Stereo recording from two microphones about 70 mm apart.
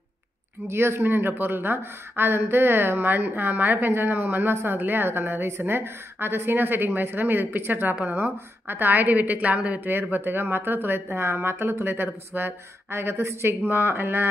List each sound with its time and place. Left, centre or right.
0.7 s speech: right
10.1 s speech: right